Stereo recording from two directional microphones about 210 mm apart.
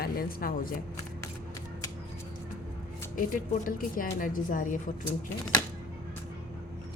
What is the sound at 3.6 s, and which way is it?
A woman's voice, 40° left (ahead or behind).